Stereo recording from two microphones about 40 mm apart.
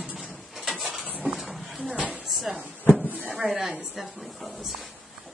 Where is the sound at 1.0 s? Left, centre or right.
Right.